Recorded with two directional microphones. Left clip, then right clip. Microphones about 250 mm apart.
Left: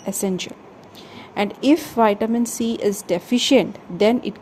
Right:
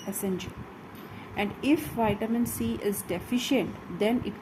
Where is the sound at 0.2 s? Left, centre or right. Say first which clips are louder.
Left 7 dB; left.